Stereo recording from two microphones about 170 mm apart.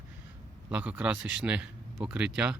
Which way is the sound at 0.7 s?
10° right (ahead or behind).